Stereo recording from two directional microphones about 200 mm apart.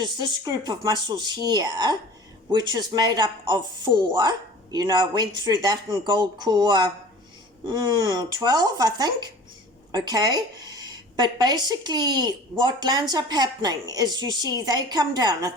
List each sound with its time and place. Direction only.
0.0 s a woman's voice: 20° right (ahead or behind)